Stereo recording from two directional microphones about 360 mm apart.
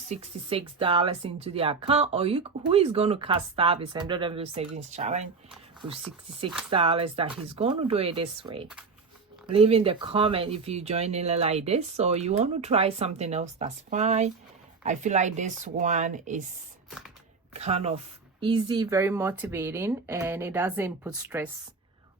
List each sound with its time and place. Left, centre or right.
0.1 s speech: centre
6.7 s speech: centre
17.5 s speech: centre